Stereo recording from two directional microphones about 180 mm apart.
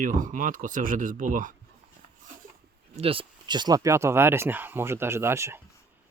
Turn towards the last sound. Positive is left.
turn(degrees=-15)  # may be behind; listen again after turning